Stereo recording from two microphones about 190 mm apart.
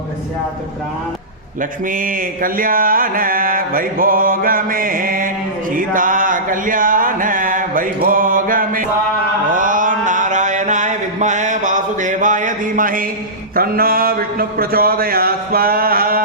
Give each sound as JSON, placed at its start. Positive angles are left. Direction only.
{"t": 1.9, "sound": "mantra", "side_deg": -45}